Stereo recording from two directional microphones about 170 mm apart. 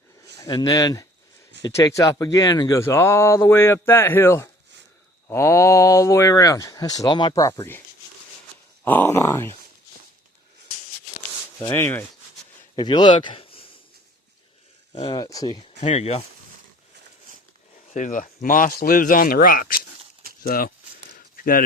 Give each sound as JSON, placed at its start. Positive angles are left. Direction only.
{"t": 0.3, "sound": "speech", "side_deg": 25}
{"t": 8.8, "sound": "speech", "side_deg": 10}
{"t": 11.6, "sound": "speech", "side_deg": 15}
{"t": 12.7, "sound": "speech", "side_deg": 25}
{"t": 14.9, "sound": "speech", "side_deg": 35}
{"t": 15.2, "sound": "speech", "side_deg": 20}
{"t": 15.8, "sound": "speech", "side_deg": 40}
{"t": 17.9, "sound": "speech", "side_deg": 50}
{"t": 21.2, "sound": "a sound", "side_deg": 55}